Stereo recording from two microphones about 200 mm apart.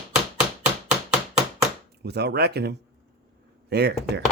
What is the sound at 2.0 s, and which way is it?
Speech, 55° right (ahead or behind).